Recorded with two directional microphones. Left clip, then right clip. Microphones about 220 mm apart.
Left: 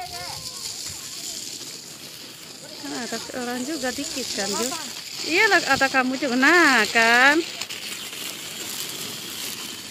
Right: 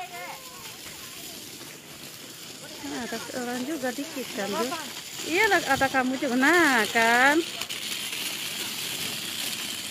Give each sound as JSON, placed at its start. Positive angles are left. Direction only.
{"t": 2.9, "sound": "speech", "side_deg": 10}
{"t": 4.3, "sound": "speech", "side_deg": -30}
{"t": 5.3, "sound": "speech", "side_deg": 5}
{"t": 7.3, "sound": "a sound", "side_deg": -45}